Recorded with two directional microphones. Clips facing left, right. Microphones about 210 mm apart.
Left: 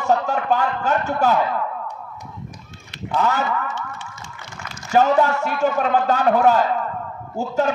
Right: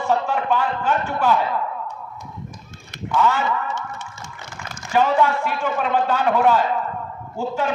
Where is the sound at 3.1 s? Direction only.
40° left (ahead or behind).